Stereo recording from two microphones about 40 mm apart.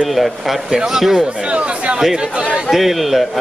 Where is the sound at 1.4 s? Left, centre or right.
Right.